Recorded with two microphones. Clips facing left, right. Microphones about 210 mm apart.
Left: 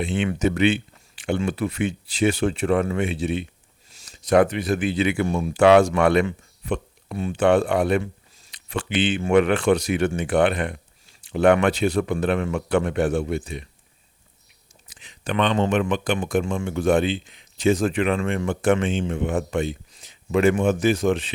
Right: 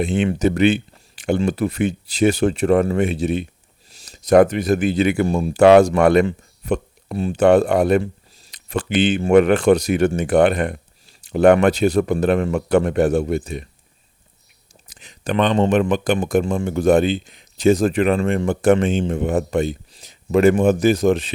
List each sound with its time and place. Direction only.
0.0 s speech: 40° right (ahead or behind)
14.8 s speech: 40° right (ahead or behind)